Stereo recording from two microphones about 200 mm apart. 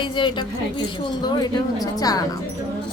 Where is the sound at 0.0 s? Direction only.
25° left (ahead or behind).